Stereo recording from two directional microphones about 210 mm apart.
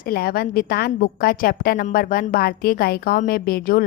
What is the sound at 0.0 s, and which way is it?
A woman's voice, 45° left (ahead or behind).